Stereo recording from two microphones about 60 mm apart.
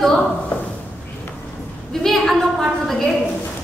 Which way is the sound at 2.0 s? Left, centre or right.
Centre.